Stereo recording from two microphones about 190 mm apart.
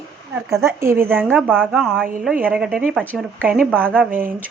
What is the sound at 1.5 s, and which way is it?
Speech, centre (ahead or behind).